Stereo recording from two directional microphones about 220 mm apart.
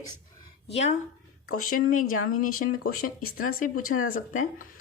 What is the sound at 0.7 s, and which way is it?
Speech, 30° left (ahead or behind).